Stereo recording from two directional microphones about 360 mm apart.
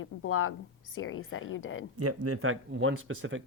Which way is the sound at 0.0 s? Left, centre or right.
Left.